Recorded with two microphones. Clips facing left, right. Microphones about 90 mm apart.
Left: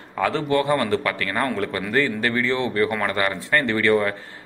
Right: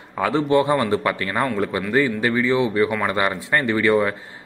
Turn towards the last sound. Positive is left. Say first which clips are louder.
# right 1 dB
turn(degrees=-10)  # may be behind; listen again after turning